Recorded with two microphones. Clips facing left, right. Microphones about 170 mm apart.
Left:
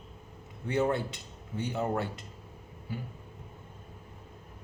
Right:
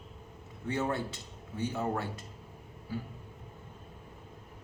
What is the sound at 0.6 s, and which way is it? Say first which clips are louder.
Speech: left 4 dB; 20° left (ahead or behind).